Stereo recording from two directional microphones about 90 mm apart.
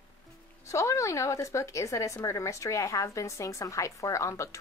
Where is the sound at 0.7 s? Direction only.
35° left (ahead or behind).